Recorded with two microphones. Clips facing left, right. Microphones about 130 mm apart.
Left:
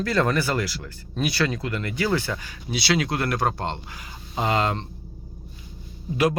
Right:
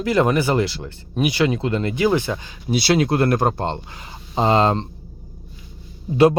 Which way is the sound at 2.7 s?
50° right (ahead or behind).